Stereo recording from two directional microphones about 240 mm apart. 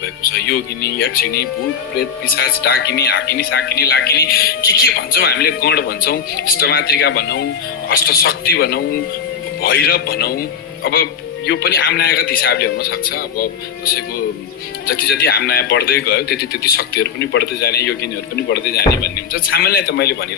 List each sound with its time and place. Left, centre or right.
0.0 s speech: left